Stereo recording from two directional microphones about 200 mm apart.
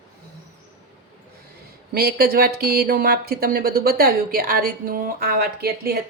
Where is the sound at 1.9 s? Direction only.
50° right (ahead or behind).